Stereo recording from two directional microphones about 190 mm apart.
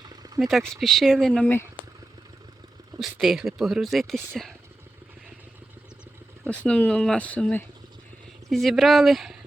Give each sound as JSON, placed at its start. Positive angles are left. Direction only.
{"t": 0.0, "sound": "a sound", "side_deg": -20}
{"t": 0.3, "sound": "speech", "side_deg": 0}
{"t": 3.0, "sound": "speech", "side_deg": 0}
{"t": 6.4, "sound": "speech", "side_deg": 5}